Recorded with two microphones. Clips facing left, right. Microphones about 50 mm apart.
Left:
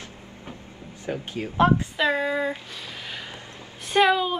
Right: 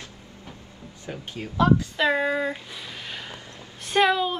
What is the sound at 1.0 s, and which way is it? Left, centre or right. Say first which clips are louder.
Speech: left 5 dB; left.